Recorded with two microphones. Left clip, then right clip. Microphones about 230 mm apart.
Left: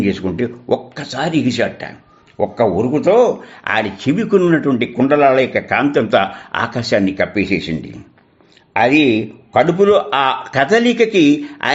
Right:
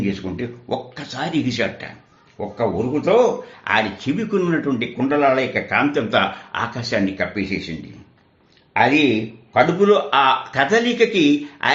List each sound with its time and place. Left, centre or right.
0.0 s speech: left
2.6 s a man's voice: left